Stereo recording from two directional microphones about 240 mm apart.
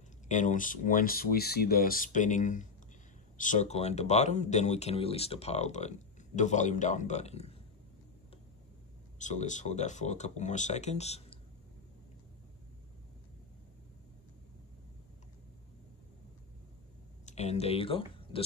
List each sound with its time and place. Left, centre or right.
0.3 s speech: left
9.2 s speech: left
17.3 s speech: left